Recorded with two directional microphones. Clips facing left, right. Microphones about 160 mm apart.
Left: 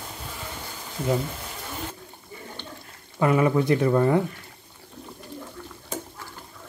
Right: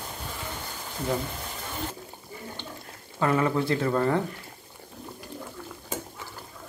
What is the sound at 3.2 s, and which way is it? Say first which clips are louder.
A man's voice: left 4 dB; 15° left (ahead or behind).